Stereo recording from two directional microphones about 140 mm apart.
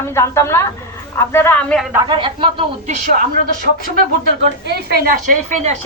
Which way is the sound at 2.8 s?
60° right (ahead or behind).